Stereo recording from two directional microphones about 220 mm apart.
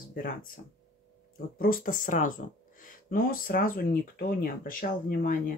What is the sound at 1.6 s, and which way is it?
Speech, 40° left (ahead or behind).